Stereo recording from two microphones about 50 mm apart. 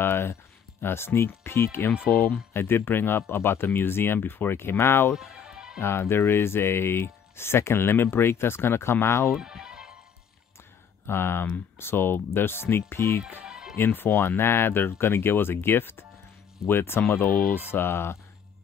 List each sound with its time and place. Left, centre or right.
0.0 s speech: left
5.1 s music: centre
5.8 s speech: left
9.4 s music: centre
11.1 s speech: left
13.5 s music: centre
13.7 s speech: left
17.6 s speech: left